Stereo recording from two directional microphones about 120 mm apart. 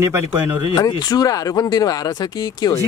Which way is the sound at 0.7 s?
35° left (ahead or behind).